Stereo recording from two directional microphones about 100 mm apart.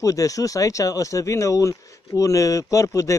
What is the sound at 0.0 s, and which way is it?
A man's voice, 35° left (ahead or behind).